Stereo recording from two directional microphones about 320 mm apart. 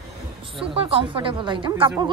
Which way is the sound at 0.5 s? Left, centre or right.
Centre.